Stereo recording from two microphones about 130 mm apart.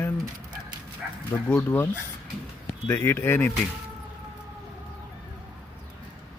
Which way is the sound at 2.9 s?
15° left (ahead or behind).